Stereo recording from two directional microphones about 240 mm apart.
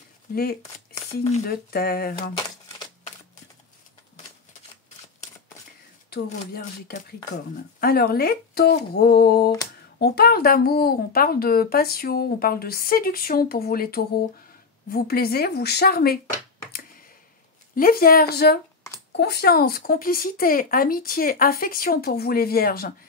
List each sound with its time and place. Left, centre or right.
0.3 s speech: left
1.7 s speech: left
2.3 s crumpling: left
6.2 s speech: left
17.7 s speech: left